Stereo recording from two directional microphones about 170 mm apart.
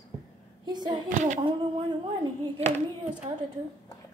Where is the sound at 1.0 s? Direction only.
50° right (ahead or behind).